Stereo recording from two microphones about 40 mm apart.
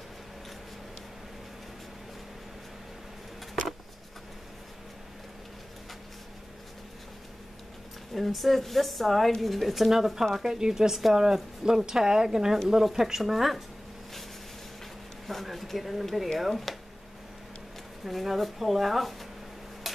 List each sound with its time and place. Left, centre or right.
8.1 s speech: centre
15.2 s a sound: centre
16.3 s speech: centre
18.0 s speech: centre